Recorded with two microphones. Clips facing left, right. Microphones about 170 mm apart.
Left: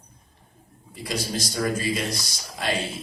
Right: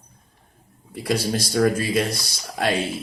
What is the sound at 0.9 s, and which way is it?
Speech, 60° right (ahead or behind).